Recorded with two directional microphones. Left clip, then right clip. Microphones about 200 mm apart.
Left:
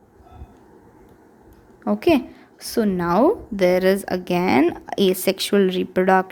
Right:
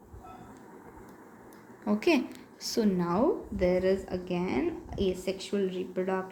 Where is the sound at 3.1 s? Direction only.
55° left (ahead or behind).